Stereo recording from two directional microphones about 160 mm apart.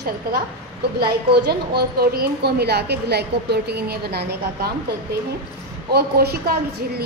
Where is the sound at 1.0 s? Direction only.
85° right.